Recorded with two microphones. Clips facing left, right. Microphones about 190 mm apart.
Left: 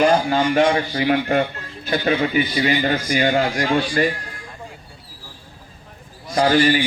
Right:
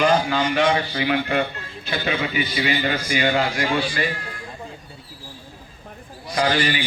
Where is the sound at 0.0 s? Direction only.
45° left (ahead or behind).